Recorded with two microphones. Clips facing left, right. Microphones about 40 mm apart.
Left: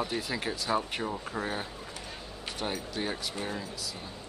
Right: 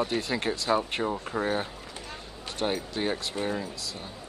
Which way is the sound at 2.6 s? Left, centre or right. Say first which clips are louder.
Right 5 dB; right.